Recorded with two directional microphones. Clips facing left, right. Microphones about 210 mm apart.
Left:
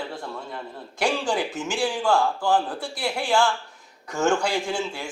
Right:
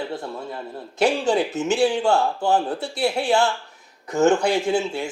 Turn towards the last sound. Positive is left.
turn(degrees=-25)  # may be behind; listen again after turning